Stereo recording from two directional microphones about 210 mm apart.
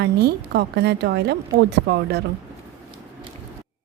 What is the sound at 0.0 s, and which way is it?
A woman's voice, 50° right (ahead or behind).